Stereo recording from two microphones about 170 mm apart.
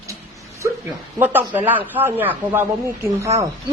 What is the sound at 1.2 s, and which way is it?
Speech, 10° right (ahead or behind).